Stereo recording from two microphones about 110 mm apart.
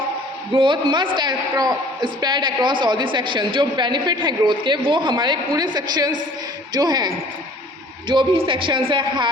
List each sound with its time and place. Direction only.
0.5 s a woman's voice: 50° right (ahead or behind)